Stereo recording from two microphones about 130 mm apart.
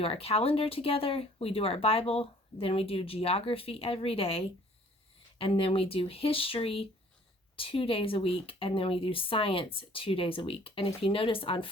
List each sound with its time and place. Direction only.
0.0 s speech: 45° left (ahead or behind)